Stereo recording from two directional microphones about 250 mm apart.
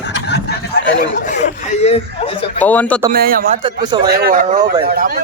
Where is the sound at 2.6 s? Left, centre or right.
Centre.